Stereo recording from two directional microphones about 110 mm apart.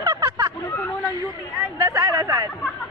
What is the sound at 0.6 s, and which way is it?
Speech, 20° left (ahead or behind).